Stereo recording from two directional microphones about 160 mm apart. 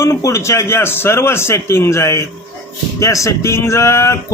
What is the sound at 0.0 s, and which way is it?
Speech, 15° left (ahead or behind).